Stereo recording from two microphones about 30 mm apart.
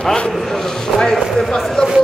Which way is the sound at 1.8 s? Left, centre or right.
Left.